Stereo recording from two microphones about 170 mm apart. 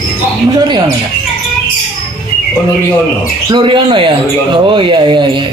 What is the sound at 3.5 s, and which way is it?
Speech, 30° right (ahead or behind).